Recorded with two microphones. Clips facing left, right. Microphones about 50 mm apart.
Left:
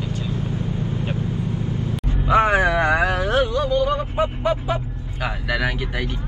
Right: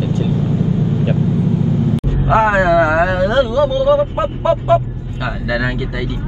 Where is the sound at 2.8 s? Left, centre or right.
Right.